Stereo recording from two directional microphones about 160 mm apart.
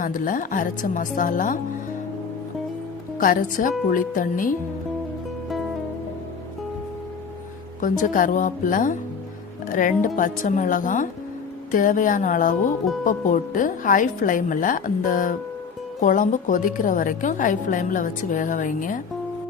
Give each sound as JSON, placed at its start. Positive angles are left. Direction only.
{"t": 0.0, "sound": "a woman's voice", "side_deg": 55}
{"t": 3.2, "sound": "a woman's voice", "side_deg": 55}
{"t": 7.8, "sound": "a woman's voice", "side_deg": 55}